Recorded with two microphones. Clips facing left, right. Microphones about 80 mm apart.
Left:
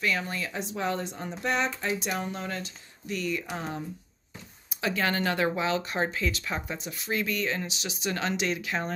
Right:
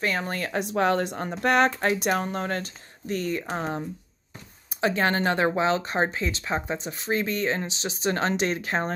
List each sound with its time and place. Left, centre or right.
0.0 s speech: right